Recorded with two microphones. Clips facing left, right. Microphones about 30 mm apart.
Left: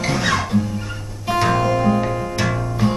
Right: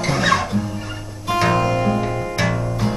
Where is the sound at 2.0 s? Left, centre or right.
Centre.